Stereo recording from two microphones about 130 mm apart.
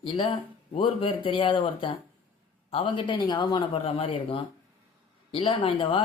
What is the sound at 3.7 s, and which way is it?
Speech, 50° left (ahead or behind).